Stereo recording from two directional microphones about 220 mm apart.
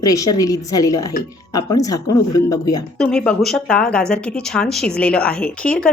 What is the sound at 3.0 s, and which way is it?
Speech, 5° left (ahead or behind).